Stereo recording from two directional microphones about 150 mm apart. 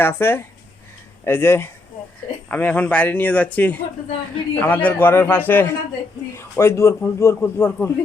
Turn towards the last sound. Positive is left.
turn(degrees=15)  # may be behind; listen again after turning